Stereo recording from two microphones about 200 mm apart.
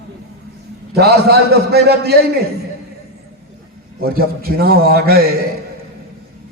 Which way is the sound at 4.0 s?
50° right (ahead or behind).